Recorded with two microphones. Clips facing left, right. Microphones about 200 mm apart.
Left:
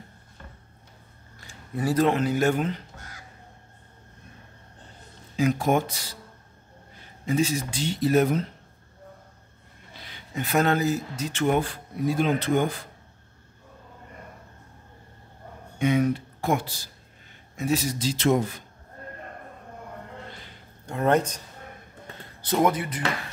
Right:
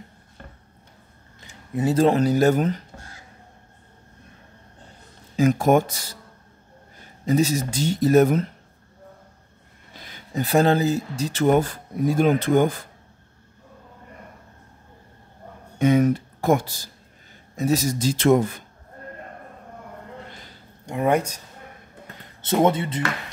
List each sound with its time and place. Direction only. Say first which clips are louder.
1.4 s speech: right 4 dB; 20° right (ahead or behind); by 2.8 s 45° right (ahead or behind)
3.0 s crow: right 1 dB; 30° right (ahead or behind)
5.3 s speech: right 5 dB; 45° right (ahead or behind)
7.2 s speech: right 4 dB; 40° right (ahead or behind)
10.0 s speech: right 5 dB; 35° right (ahead or behind)
15.8 s speech: right 5 dB; 45° right (ahead or behind)
20.8 s speech: right 1 dB; 15° right (ahead or behind)
22.4 s speech: right 3 dB; 25° right (ahead or behind)